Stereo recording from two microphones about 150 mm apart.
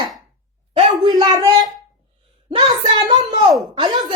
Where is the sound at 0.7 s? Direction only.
40° right (ahead or behind).